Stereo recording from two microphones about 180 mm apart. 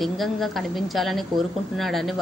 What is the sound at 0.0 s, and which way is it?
A woman's voice, centre (ahead or behind).